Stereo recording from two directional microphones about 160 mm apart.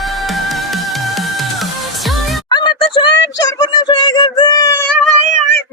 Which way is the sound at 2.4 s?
25° left (ahead or behind).